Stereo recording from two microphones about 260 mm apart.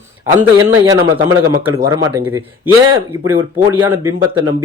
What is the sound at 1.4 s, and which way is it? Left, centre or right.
Speech, right.